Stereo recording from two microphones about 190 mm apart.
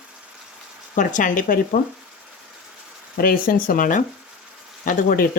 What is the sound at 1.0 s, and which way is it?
Speech, 40° left (ahead or behind).